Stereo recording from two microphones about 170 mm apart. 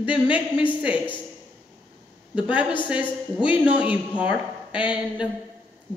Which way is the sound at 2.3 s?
5° right (ahead or behind).